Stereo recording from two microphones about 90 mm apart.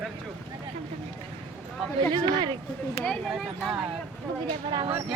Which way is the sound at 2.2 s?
50° right (ahead or behind).